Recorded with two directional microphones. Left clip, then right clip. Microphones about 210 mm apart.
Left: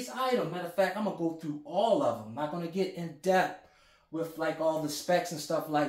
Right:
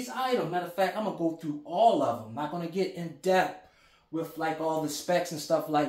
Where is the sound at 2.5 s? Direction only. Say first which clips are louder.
Right 2 dB; 20° right (ahead or behind).